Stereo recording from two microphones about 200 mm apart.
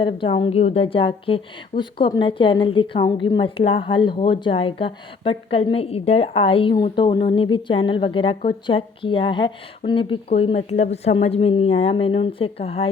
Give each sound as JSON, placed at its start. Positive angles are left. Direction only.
{"t": 0.0, "sound": "a woman's voice", "side_deg": 25}